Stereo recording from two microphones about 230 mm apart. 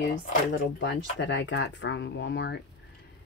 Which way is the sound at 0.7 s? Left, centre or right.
Left.